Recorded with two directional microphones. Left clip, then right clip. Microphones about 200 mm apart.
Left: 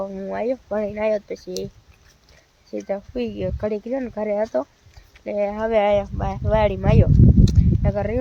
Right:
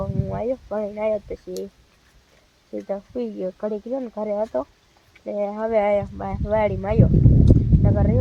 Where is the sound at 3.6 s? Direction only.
15° left (ahead or behind).